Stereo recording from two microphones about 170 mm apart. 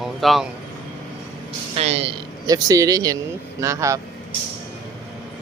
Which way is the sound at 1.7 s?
35° right (ahead or behind).